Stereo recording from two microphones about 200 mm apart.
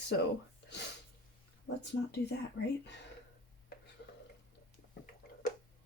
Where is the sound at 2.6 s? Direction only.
55° left (ahead or behind).